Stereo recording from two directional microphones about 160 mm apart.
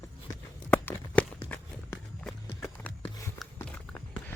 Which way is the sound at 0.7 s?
10° left (ahead or behind).